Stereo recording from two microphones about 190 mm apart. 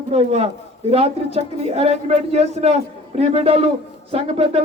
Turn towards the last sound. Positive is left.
turn(degrees=-30)  # may be behind; listen again after turning